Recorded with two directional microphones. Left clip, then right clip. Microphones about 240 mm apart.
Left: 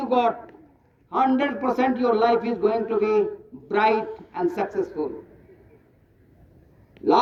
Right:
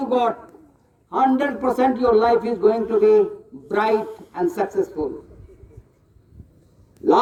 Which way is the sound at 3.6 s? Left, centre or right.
Centre.